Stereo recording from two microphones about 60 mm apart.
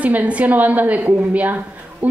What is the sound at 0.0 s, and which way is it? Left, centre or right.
A woman's voice, right.